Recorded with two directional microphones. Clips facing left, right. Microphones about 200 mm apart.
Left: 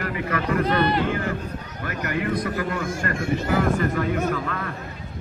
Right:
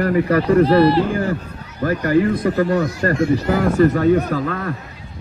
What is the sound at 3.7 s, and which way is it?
Speech, 40° right (ahead or behind).